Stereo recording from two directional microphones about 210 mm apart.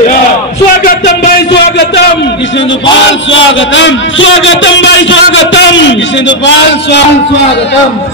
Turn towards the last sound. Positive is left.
turn(degrees=55)  # may be behind; listen again after turning